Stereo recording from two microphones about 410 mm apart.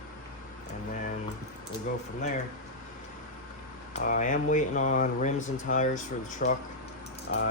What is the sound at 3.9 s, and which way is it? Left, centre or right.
Speech, centre.